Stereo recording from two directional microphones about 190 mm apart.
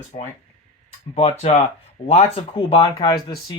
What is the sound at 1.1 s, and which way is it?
Speech, 35° left (ahead or behind).